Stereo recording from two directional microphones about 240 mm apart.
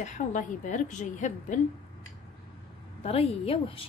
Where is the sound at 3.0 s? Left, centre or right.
Left.